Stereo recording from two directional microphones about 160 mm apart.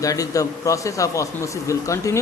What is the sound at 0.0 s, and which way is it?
A man's voice, 20° left (ahead or behind).